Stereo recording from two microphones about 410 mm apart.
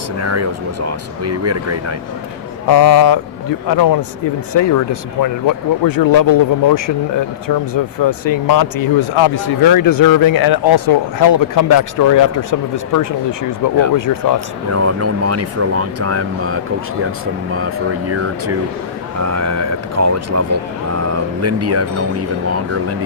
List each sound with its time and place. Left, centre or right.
0.2 s speech: right
2.6 s speech: left
8.0 s speech: left
14.7 s speech: right
19.2 s speech: right